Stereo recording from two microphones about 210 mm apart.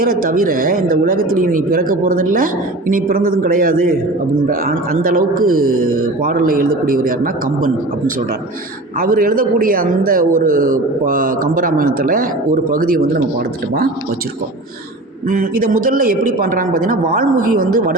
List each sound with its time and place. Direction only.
0.0 s a man's voice: 40° right (ahead or behind)
15.3 s a man's voice: 40° right (ahead or behind)